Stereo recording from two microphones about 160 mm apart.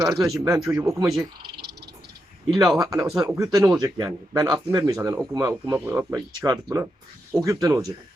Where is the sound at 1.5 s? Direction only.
90° right.